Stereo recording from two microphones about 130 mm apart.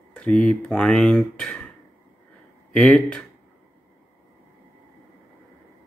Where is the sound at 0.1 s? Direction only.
5° left (ahead or behind).